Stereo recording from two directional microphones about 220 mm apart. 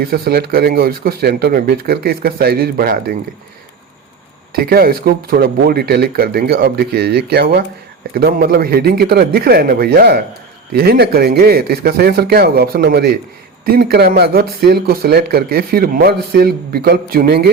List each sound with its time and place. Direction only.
0.0 s speech: 45° right (ahead or behind)
4.5 s speech: 45° right (ahead or behind)